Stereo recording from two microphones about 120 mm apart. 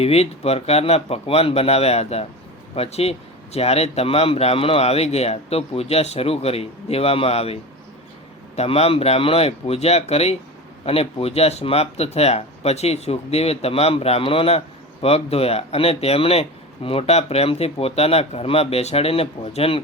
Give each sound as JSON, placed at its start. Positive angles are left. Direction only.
{"t": 0.0, "sound": "speech", "side_deg": 60}